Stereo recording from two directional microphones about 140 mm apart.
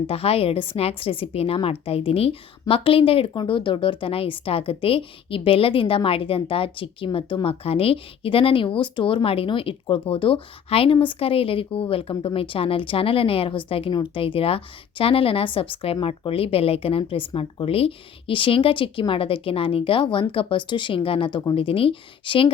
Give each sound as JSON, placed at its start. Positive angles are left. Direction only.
{"t": 0.1, "sound": "a woman's voice", "side_deg": 45}